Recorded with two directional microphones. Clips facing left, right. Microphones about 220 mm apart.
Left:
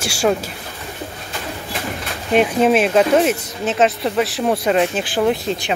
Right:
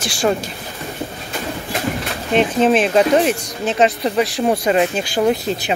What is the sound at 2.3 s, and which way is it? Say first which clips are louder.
Speech: even; 10° left (ahead or behind).